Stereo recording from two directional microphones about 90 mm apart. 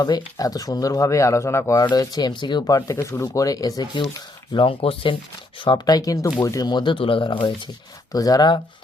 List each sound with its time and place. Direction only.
0.0 s speech: 45° left (ahead or behind); by 1.8 s 30° left (ahead or behind)
1.8 s speech: 50° left (ahead or behind)
2.9 s speech: 35° left (ahead or behind)
4.5 s speech: 80° left
5.6 s speech: 50° left (ahead or behind)
6.7 s speech: 60° left (ahead or behind)
8.1 s speech: 45° left (ahead or behind)